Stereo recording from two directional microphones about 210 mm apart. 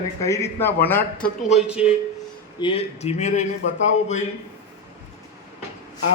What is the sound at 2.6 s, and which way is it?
Speech, 25° left (ahead or behind).